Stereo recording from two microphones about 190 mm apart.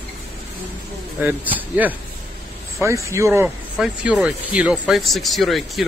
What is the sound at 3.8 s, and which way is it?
Speech, centre (ahead or behind).